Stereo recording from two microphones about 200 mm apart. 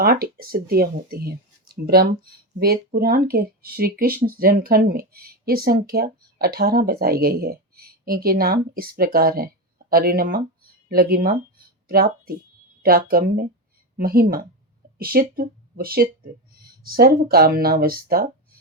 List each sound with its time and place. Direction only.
0.0 s speech: 50° right (ahead or behind)